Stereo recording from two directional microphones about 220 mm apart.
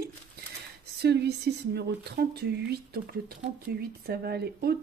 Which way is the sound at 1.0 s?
50° right (ahead or behind).